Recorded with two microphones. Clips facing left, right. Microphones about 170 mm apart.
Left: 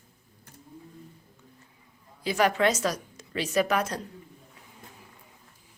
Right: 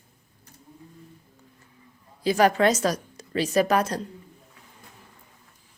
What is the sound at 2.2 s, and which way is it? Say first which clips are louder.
A woman's voice: right 4 dB; 40° right (ahead or behind).